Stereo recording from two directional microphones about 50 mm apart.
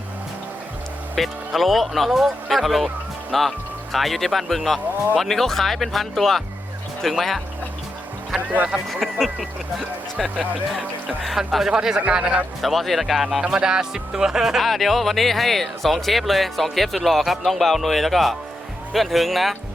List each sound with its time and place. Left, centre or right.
1.1 s speech: centre
8.9 s speech: centre
11.2 s speech: centre
12.6 s speech: centre
13.5 s speech: centre